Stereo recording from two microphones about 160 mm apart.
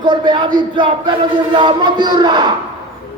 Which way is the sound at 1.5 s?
30° right (ahead or behind).